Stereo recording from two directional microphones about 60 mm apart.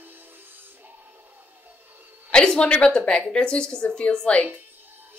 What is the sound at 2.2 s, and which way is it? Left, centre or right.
A woman's voice, centre.